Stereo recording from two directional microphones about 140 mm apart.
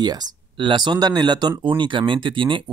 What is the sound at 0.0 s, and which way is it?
Speech, 30° right (ahead or behind).